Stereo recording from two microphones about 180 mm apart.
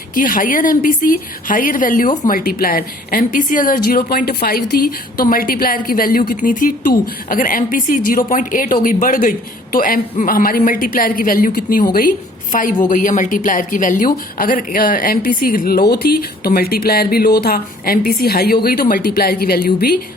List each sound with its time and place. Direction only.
0.1 s a woman's voice: 50° left (ahead or behind)